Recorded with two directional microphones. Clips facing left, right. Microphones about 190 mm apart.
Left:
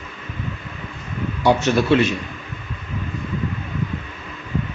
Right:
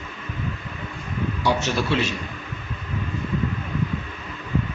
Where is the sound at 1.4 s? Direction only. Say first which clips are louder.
Left 7 dB; 55° left (ahead or behind).